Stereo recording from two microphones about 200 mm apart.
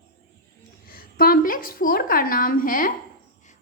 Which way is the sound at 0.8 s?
45° left (ahead or behind).